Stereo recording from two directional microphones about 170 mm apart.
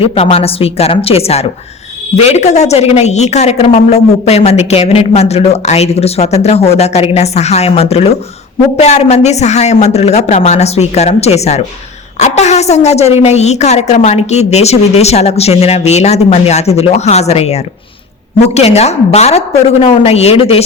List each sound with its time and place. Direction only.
0.0 s a woman's voice: 35° left (ahead or behind)